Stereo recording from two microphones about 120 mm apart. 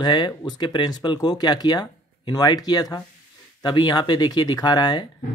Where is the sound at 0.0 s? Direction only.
35° left (ahead or behind).